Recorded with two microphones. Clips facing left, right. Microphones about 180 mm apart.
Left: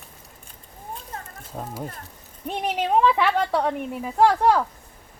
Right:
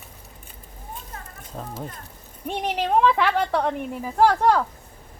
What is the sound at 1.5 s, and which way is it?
Speech, 5° left (ahead or behind).